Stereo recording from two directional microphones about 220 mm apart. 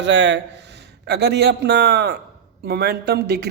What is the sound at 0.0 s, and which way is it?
Speech, 55° right (ahead or behind).